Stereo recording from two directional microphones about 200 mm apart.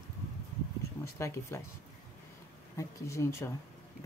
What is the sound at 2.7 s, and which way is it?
Speech, 15° left (ahead or behind).